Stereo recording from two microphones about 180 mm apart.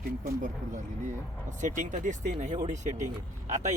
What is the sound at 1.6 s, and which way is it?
Speech, 45° right (ahead or behind).